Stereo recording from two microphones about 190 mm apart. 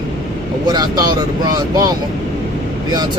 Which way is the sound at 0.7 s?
20° right (ahead or behind).